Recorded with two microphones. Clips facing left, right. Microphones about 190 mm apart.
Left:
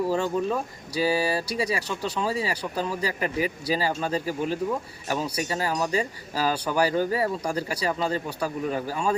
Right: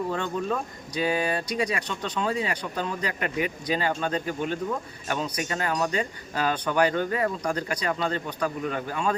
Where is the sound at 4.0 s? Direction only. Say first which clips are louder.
Left 1 dB; 5° left (ahead or behind).